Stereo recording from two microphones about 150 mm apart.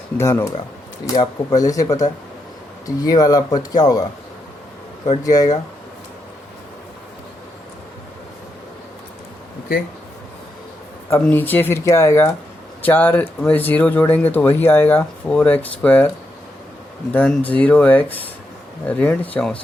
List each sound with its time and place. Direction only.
0.2 s speech: 15° left (ahead or behind)
5.2 s speech: 25° left (ahead or behind)
11.1 s speech: 10° left (ahead or behind)
17.1 s speech: 10° left (ahead or behind)